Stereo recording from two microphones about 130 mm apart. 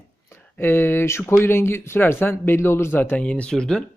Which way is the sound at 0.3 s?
15° left (ahead or behind).